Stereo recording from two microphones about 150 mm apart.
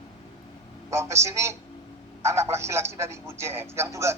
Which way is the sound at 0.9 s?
20° right (ahead or behind).